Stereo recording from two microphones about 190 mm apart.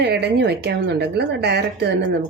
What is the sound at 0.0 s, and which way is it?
A woman's voice, 60° right (ahead or behind).